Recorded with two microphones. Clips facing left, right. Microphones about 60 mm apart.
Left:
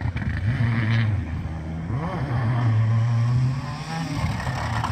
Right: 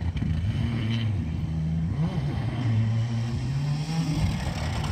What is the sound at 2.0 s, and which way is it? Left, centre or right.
Vehicle, left.